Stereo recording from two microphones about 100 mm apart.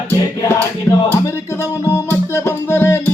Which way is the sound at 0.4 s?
25° left (ahead or behind).